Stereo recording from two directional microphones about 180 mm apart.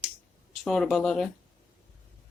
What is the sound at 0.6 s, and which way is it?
Speech, 5° left (ahead or behind).